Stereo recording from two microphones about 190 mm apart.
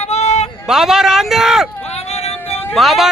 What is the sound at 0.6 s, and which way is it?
A man's voice, centre (ahead or behind).